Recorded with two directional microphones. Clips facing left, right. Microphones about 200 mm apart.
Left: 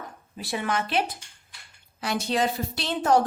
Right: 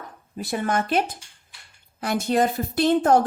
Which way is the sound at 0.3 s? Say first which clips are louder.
Right 4 dB; 45° right (ahead or behind).